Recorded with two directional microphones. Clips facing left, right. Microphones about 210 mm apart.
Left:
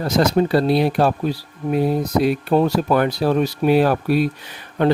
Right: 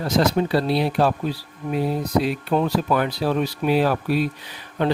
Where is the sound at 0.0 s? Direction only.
45° left (ahead or behind).